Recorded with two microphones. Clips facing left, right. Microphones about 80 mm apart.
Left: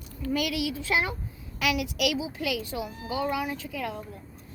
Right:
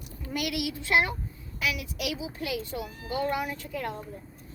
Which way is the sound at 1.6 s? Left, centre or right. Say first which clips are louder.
Left 5 dB; left.